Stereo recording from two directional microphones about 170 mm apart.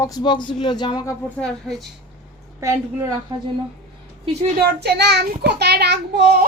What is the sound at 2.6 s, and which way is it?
Speech, 15° right (ahead or behind).